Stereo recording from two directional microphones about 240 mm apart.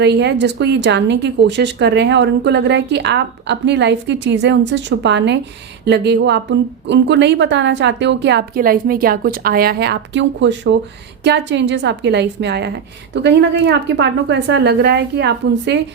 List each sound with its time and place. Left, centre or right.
0.0 s speech: right